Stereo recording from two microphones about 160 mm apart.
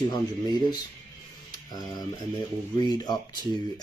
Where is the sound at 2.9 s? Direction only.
25° left (ahead or behind).